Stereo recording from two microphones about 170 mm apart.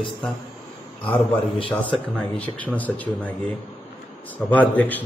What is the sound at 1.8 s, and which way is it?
A man's voice, 5° left (ahead or behind).